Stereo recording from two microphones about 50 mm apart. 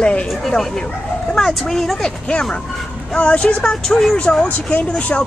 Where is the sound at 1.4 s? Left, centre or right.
Centre.